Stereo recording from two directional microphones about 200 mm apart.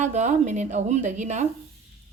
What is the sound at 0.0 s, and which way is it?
A woman's voice, 35° right (ahead or behind).